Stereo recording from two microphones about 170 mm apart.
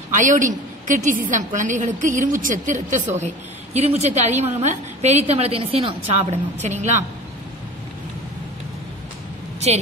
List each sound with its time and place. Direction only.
0.1 s a woman's voice: 50° right (ahead or behind)